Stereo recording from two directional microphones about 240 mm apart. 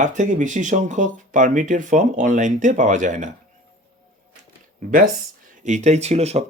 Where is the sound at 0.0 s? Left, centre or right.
Right.